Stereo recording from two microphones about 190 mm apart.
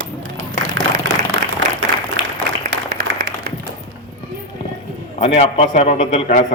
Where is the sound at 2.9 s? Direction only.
55° right (ahead or behind).